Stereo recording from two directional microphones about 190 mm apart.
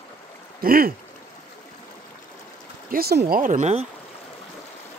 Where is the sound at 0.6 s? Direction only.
50° right (ahead or behind).